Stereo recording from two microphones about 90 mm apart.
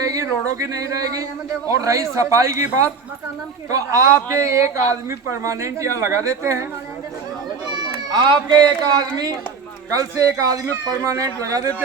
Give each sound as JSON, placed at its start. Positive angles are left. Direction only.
{"t": 0.0, "sound": "speech", "side_deg": -40}
{"t": 3.7, "sound": "speech", "side_deg": -40}
{"t": 7.7, "sound": "a sound", "side_deg": -60}
{"t": 9.9, "sound": "speech", "side_deg": -40}